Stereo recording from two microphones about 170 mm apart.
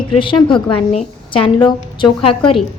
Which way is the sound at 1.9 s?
30° left (ahead or behind).